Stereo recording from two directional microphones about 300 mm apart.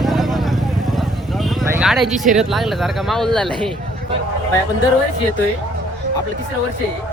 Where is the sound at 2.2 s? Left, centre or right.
Centre.